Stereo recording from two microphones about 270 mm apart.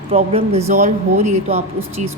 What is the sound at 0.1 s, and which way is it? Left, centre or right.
Speech, right.